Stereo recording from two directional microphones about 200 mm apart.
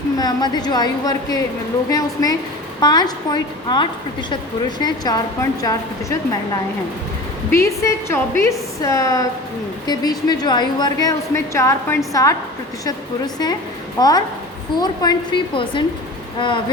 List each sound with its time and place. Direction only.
0.2 s a woman's voice: 20° left (ahead or behind)
7.5 s a woman's voice: 15° left (ahead or behind)